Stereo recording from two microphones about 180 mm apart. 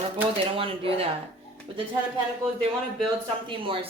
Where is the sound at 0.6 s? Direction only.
30° right (ahead or behind).